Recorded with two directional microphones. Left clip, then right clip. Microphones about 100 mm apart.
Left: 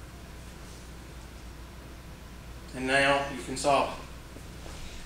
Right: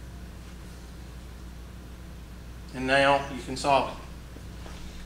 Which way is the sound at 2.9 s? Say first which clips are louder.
Right 3 dB; 50° right (ahead or behind).